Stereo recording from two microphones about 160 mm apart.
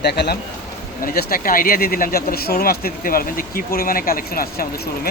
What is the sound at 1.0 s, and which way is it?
Speech, 65° left (ahead or behind).